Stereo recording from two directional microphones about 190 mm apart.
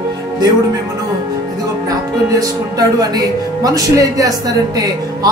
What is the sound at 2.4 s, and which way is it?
Speech, 20° right (ahead or behind).